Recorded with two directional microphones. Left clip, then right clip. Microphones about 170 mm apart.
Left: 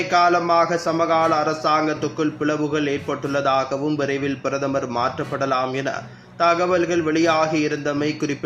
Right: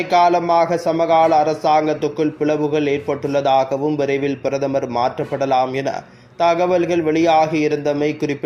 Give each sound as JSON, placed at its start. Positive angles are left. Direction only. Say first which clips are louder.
{"t": 0.1, "sound": "speech", "louder": "right 3 dB", "side_deg": -20}